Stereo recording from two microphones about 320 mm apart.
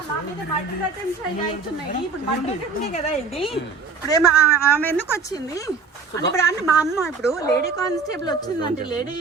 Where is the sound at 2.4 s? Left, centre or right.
Centre.